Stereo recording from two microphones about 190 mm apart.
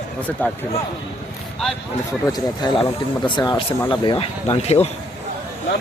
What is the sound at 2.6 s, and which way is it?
Speech, 20° left (ahead or behind).